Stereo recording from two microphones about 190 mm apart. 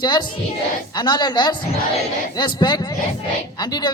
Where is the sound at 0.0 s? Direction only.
20° left (ahead or behind).